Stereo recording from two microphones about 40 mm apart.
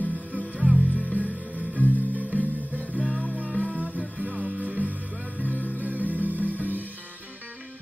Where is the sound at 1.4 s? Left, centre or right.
Left.